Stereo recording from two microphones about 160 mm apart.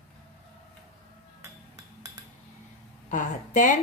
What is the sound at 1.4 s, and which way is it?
Chink, 20° right (ahead or behind).